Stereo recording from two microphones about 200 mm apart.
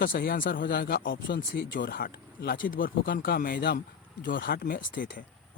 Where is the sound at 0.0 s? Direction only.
45° left (ahead or behind).